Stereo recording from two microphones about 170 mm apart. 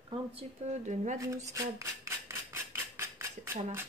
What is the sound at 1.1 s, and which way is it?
Cutlery, 20° right (ahead or behind).